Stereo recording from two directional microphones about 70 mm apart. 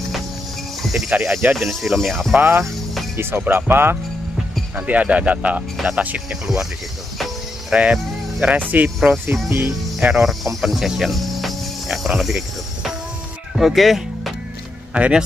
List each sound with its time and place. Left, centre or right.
0.8 s speech: centre
2.3 s speech: right
2.6 s music: centre
3.2 s speech: right
4.7 s speech: right
7.7 s speech: centre
9.9 s speech: centre
15.0 s speech: centre